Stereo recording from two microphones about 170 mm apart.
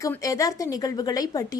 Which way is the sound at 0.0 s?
20° left (ahead or behind).